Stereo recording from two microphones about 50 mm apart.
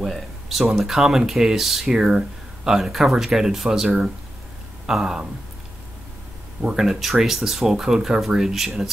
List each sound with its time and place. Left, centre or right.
0.0 s speech: centre
6.6 s speech: centre
6.9 s speech: centre